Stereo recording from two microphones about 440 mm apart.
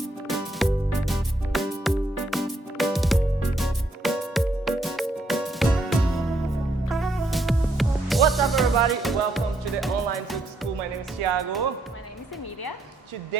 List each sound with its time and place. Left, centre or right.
0.3 s music: centre
7.0 s music: centre
11.2 s speech: right